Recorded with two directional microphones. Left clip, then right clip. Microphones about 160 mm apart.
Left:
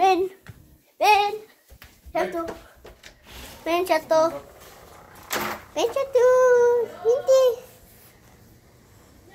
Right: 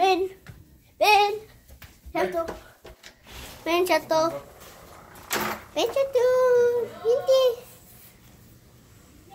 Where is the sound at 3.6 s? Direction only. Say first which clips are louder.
Even; 10° right (ahead or behind).